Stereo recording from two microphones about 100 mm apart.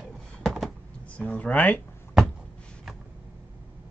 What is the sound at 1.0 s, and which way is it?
Speech, 15° left (ahead or behind).